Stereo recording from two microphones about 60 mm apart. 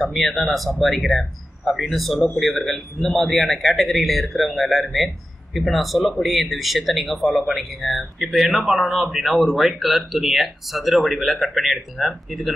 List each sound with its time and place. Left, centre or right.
0.0 s a man's voice: centre